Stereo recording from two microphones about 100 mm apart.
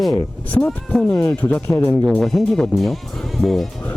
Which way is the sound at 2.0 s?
5° left (ahead or behind).